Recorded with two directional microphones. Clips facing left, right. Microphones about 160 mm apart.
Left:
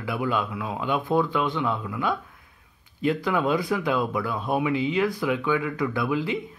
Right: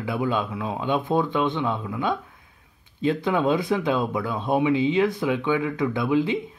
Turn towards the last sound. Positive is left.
turn(degrees=-20)  # may be behind; listen again after turning